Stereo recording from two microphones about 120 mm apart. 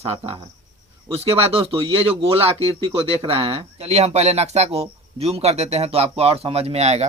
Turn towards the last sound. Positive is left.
turn(degrees=-70)  # may be behind; listen again after turning